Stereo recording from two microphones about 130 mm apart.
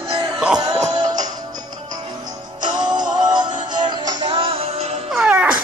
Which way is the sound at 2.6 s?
35° right (ahead or behind).